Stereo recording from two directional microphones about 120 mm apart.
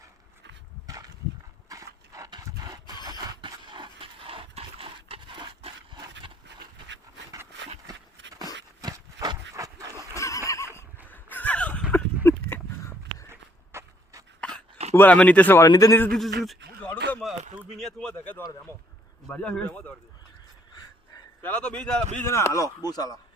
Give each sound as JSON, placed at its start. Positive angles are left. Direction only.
{"t": 0.9, "sound": "a sound", "side_deg": -30}
{"t": 7.9, "sound": "a sound", "side_deg": -30}
{"t": 10.2, "sound": "neigh", "side_deg": 25}
{"t": 11.1, "sound": "a sound", "side_deg": 15}
{"t": 13.3, "sound": "walk", "side_deg": -25}
{"t": 14.9, "sound": "speech", "side_deg": 15}
{"t": 15.6, "sound": "speech", "side_deg": 30}
{"t": 16.0, "sound": "speech", "side_deg": 5}
{"t": 16.8, "sound": "a sound", "side_deg": 10}
{"t": 18.1, "sound": "speech", "side_deg": 15}
{"t": 21.4, "sound": "speech", "side_deg": 15}
{"t": 22.1, "sound": "speech", "side_deg": 20}